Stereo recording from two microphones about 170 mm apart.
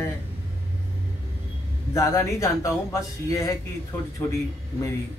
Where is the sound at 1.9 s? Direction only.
15° left (ahead or behind).